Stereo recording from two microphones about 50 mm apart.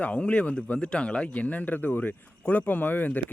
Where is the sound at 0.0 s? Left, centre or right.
Left.